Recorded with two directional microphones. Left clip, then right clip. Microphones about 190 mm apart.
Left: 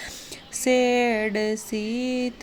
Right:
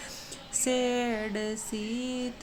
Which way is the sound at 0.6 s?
30° left (ahead or behind).